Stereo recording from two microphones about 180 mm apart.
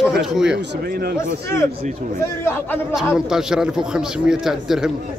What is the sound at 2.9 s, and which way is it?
A man's voice, 5° right (ahead or behind).